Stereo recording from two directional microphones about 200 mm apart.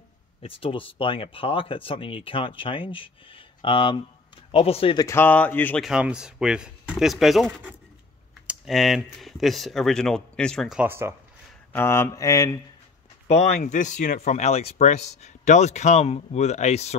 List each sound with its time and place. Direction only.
0.4 s speech: 25° left (ahead or behind)
5.0 s mantra: 10° left (ahead or behind)
5.9 s speech: 5° right (ahead or behind)
11.7 s mantra: 10° left (ahead or behind)
13.3 s speech: 35° left (ahead or behind)